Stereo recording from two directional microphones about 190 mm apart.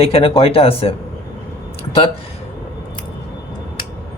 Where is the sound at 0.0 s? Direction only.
30° left (ahead or behind).